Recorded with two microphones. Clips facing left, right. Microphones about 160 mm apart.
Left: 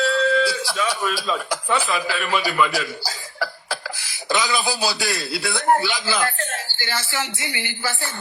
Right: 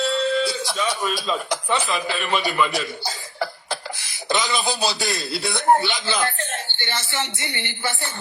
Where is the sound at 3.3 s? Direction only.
25° right (ahead or behind).